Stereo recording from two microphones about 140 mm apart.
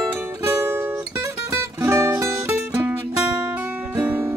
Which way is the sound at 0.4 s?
15° right (ahead or behind).